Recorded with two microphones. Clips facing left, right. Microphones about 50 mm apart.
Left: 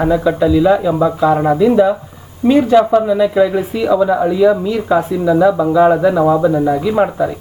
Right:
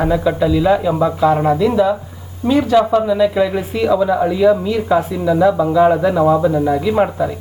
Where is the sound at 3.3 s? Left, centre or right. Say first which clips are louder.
Left 3 dB; centre.